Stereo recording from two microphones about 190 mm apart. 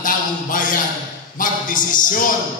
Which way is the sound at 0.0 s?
45° left (ahead or behind).